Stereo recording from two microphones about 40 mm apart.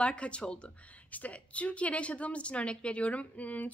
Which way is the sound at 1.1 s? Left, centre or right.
Left.